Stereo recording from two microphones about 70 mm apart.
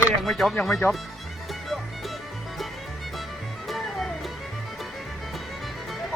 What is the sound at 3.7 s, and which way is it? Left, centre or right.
Music, centre.